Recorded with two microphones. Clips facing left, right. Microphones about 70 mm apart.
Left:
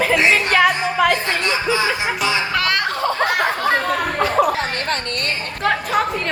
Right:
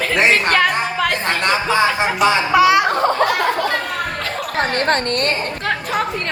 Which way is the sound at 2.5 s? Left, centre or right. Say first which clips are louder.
Right 8 dB; centre.